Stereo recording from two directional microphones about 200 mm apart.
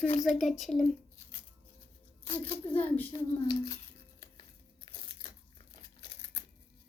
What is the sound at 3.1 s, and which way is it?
Speech, 20° left (ahead or behind).